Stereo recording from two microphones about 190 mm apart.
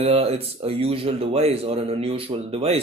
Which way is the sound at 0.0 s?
30° right (ahead or behind).